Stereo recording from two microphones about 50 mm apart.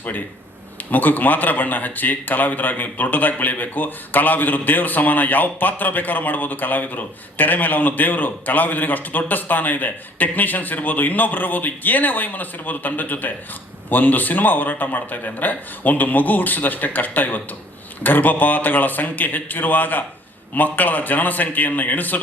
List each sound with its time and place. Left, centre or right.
0.8 s a man's voice: left